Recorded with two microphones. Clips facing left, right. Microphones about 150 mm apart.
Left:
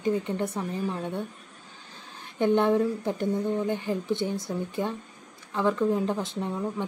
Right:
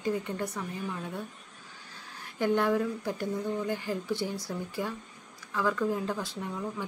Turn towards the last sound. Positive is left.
turn(degrees=25)  # may be behind; listen again after turning